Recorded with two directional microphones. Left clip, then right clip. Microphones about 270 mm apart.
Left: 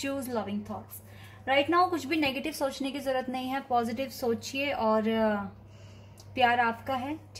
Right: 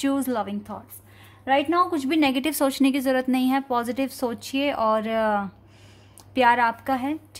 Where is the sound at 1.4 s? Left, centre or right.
Right.